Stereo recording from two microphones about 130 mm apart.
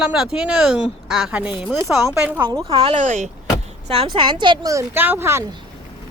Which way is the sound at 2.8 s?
70° right (ahead or behind).